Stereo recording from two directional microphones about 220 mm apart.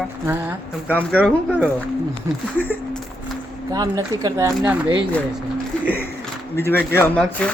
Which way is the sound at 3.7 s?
15° right (ahead or behind).